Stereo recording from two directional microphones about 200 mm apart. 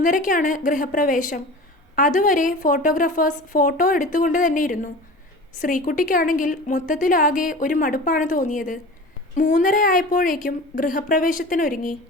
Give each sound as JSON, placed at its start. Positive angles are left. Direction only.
{"t": 0.0, "sound": "a woman's voice", "side_deg": 40}